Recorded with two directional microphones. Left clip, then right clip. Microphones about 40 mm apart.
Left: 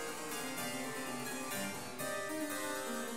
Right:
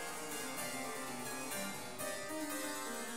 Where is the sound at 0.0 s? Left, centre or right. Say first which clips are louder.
Left 2 dB; right.